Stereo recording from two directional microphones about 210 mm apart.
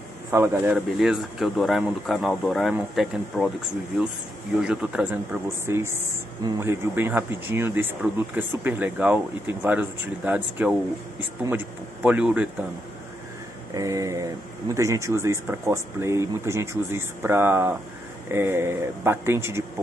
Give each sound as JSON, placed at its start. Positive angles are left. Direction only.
{"t": 0.3, "sound": "speech", "side_deg": -15}
{"t": 4.6, "sound": "speech", "side_deg": -5}
{"t": 13.7, "sound": "speech", "side_deg": -15}